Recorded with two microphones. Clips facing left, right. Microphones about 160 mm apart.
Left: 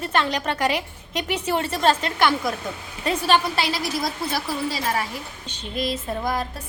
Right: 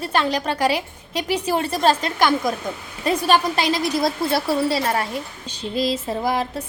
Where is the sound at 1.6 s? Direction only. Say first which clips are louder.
Right 1 dB; 10° right (ahead or behind).